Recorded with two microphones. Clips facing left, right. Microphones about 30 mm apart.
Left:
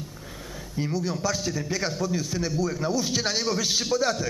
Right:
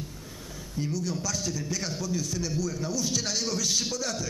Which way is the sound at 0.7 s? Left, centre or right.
Left.